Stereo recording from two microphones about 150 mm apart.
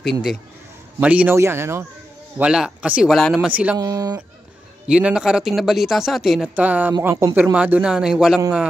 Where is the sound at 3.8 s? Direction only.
25° right (ahead or behind).